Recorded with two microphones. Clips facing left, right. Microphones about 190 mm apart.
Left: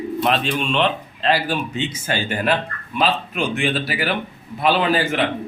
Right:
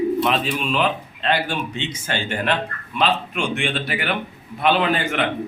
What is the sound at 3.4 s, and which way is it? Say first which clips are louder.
Speech: left 2 dB; 35° left (ahead or behind).